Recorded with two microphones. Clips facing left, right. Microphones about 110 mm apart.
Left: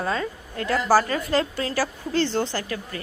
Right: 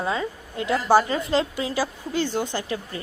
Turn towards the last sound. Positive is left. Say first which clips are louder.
# right 1 dB
turn(degrees=-20)  # may be behind; listen again after turning